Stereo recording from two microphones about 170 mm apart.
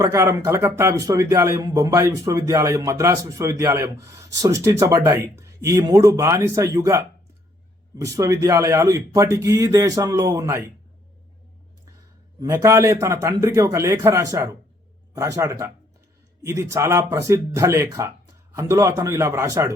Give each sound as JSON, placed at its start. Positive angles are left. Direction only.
{"t": 0.0, "sound": "speech", "side_deg": -15}
{"t": 12.4, "sound": "speech", "side_deg": -15}